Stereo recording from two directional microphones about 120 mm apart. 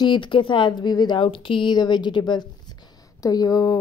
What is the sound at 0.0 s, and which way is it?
Speech, 40° left (ahead or behind).